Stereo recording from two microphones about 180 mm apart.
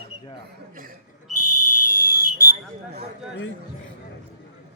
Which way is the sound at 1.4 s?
50° left (ahead or behind).